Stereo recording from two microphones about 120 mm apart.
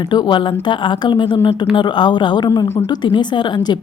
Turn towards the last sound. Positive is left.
turn(degrees=40)  # may be behind; listen again after turning